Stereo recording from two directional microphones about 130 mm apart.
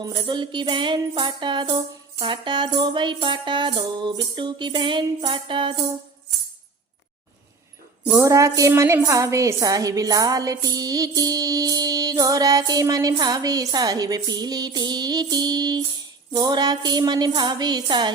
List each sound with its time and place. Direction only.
0.0 s music: 35° right (ahead or behind)
8.1 s a woman's voice: 25° right (ahead or behind)
16.3 s music: 30° right (ahead or behind)